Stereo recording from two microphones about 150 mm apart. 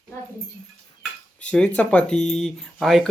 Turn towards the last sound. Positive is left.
turn(degrees=0)  # may be behind; listen again after turning